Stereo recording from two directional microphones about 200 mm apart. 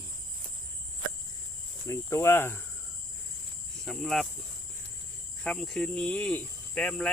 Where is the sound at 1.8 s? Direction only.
15° left (ahead or behind).